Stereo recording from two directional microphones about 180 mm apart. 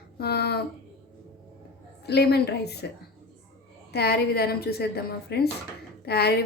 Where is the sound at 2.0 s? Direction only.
65° left (ahead or behind).